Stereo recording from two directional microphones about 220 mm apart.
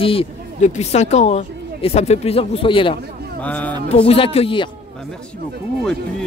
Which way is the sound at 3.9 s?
25° left (ahead or behind).